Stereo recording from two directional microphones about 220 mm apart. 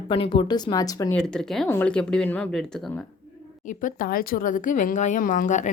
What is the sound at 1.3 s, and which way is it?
A woman's voice, centre (ahead or behind).